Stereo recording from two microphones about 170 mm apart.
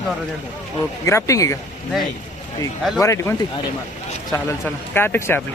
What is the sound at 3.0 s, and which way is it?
Speech, 15° left (ahead or behind).